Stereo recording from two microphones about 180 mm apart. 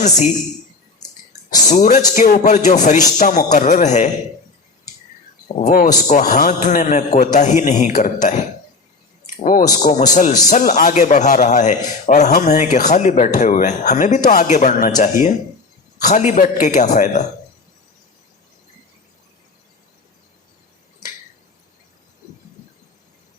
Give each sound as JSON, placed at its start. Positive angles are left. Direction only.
{"t": 1.6, "sound": "a man's voice", "side_deg": 45}
{"t": 5.5, "sound": "a man's voice", "side_deg": 45}